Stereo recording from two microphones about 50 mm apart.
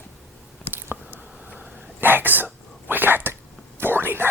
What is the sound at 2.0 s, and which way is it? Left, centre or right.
Whispering, right.